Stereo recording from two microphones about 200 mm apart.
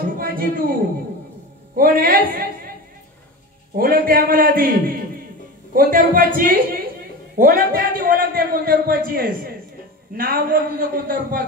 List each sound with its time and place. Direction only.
0.2 s a sound: 45° right (ahead or behind)
1.8 s a man's voice: 45° right (ahead or behind)
3.7 s a man's voice: 50° right (ahead or behind)